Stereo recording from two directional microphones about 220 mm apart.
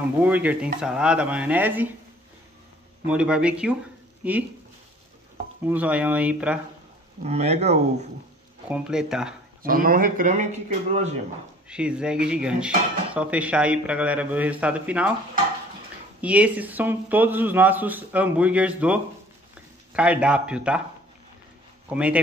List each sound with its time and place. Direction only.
0.2 s speech: 5° right (ahead or behind)
3.1 s speech: 5° right (ahead or behind)
5.7 s speech: 5° right (ahead or behind)
7.2 s speech: 30° right (ahead or behind)
8.6 s speech: 5° right (ahead or behind)
9.6 s speech: 40° right (ahead or behind)
11.7 s speech: 5° right (ahead or behind)
16.2 s speech: 5° right (ahead or behind)
21.8 s speech: 5° right (ahead or behind)